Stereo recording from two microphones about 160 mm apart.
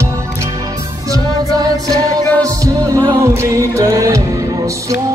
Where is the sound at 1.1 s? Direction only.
25° right (ahead or behind).